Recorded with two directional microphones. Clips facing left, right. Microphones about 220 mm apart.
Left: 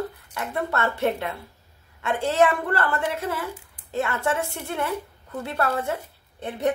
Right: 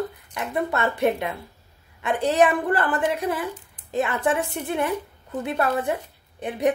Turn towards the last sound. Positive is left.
turn(degrees=-15)  # may be behind; listen again after turning